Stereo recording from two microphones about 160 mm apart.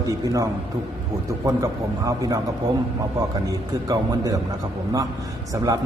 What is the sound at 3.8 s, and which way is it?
Speech, 25° right (ahead or behind).